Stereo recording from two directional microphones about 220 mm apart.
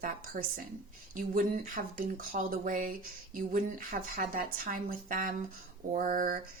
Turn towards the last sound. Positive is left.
turn(degrees=-40)  # may be behind; listen again after turning